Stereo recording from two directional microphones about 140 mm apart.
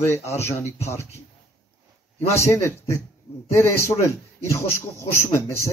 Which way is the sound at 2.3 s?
20° left (ahead or behind).